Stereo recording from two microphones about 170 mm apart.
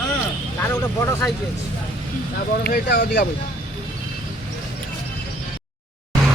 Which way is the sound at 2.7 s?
65° left (ahead or behind).